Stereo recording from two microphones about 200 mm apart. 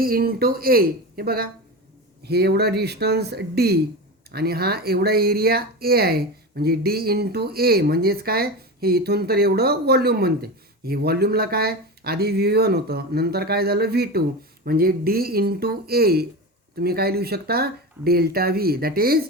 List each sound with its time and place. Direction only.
0.0 s speech: 50° right (ahead or behind)